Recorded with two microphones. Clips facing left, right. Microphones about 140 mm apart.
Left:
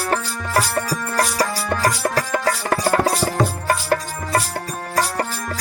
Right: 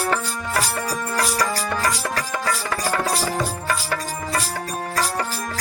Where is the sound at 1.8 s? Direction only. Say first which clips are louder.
Left 4 dB; 40° left (ahead or behind).